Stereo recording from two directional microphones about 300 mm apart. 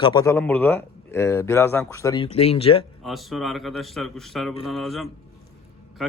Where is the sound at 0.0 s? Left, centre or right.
Centre.